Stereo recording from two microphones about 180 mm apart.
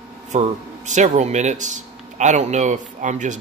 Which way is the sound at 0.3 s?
40° right (ahead or behind).